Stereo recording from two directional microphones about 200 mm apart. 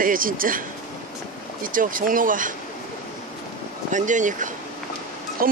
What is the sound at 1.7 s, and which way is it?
Speech, 45° right (ahead or behind).